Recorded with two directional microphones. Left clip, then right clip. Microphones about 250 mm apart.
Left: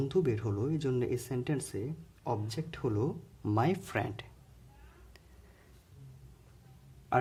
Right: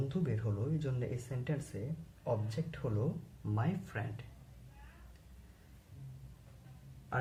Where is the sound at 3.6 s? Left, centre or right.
Left.